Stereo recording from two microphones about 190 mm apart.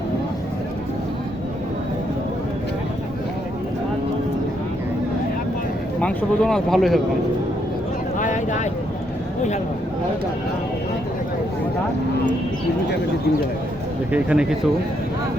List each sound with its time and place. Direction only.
6.0 s speech: 5° left (ahead or behind)
8.2 s vehicle: 40° left (ahead or behind)
14.1 s speech: 5° right (ahead or behind)